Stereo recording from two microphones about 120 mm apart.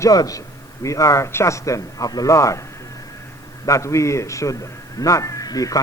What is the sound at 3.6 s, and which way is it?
A man's voice, 25° left (ahead or behind).